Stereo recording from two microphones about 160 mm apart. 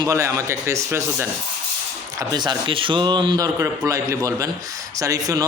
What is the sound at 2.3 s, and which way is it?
Speech, 25° right (ahead or behind).